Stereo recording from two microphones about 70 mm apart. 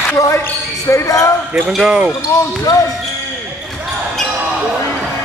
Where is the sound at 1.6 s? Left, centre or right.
Centre.